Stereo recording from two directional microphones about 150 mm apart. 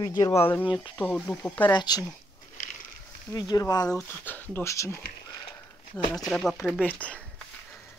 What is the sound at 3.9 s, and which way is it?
Speech, 10° left (ahead or behind).